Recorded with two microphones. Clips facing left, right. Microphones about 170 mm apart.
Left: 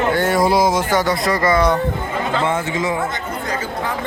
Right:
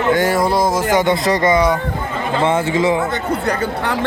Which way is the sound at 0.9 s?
20° right (ahead or behind).